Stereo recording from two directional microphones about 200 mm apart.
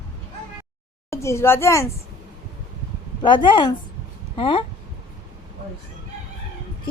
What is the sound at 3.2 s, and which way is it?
A woman's voice, 25° left (ahead or behind).